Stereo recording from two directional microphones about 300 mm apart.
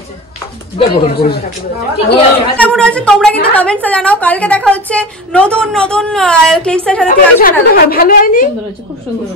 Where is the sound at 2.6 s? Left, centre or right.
Centre.